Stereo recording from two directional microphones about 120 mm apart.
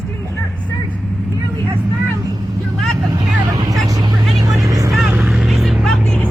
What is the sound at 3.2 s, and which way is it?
Vehicle, 35° right (ahead or behind).